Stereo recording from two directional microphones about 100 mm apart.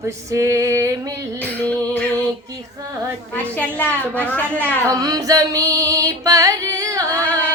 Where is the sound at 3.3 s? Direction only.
15° left (ahead or behind).